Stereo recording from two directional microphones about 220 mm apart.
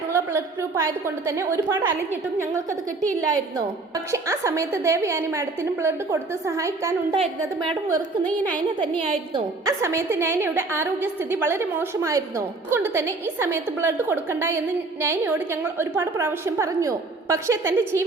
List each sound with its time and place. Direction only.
0.8 s a woman's voice: 10° right (ahead or behind)